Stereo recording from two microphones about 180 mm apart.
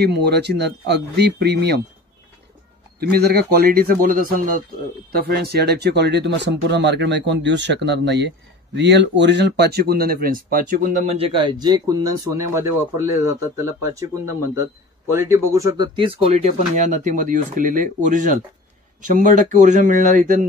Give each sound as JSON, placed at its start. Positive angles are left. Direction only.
{"t": 0.0, "sound": "speech", "side_deg": -65}
{"t": 3.0, "sound": "speech", "side_deg": -60}
{"t": 5.1, "sound": "speech", "side_deg": -60}